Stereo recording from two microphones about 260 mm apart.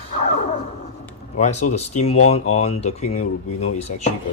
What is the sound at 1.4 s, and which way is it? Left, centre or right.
Speech, left.